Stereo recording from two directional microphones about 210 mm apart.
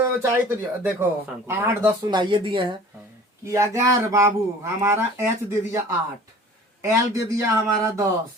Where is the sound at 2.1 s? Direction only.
20° right (ahead or behind).